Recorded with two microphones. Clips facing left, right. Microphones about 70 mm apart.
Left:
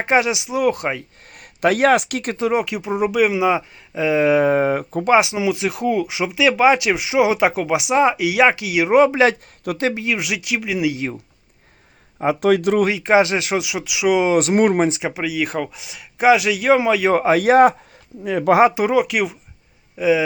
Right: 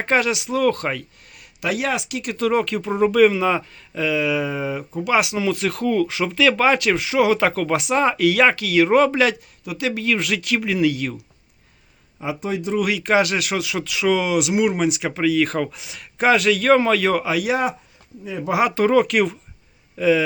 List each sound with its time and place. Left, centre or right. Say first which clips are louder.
0.0 s speech: left 2 dB; centre
1.3 s speech: left 7 dB; left
2.4 s speech: right 1 dB; centre; by 5.0 s left
5.0 s speech: left 4 dB; left
5.4 s speech: left 1 dB; centre
10.9 s speech: left 1 dB; left
12.4 s speech: left 7 dB; left
12.8 s speech: left 3 dB; left
14.3 s speech: left 4 dB; left
14.8 s speech: even; left
15.1 s speech: right 3 dB; centre
17.1 s speech: left 6 dB; left
18.3 s speech: left 9 dB; left
18.7 s speech: right 1 dB; centre